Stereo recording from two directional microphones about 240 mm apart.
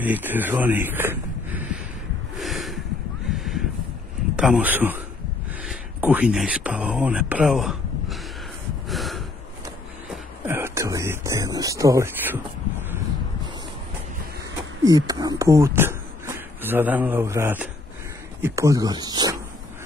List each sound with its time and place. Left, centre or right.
0.0 s speech: centre
2.3 s snort: centre
3.3 s a sound: centre
4.4 s speech: centre
8.8 s snort: centre
10.4 s speech: centre
14.9 s speech: centre